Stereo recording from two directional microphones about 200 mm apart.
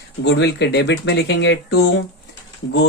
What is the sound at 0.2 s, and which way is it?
Speech, 60° left (ahead or behind).